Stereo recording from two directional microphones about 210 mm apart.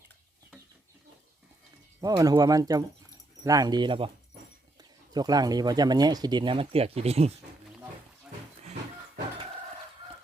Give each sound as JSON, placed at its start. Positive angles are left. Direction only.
{"t": 2.0, "sound": "speech", "side_deg": -15}